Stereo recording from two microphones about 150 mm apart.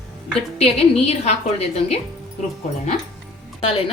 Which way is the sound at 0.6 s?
45° left (ahead or behind).